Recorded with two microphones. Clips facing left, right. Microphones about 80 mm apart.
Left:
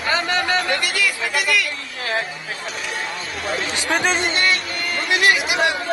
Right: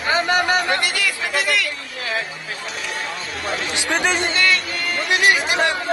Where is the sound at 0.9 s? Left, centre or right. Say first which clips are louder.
Left 1 dB; left.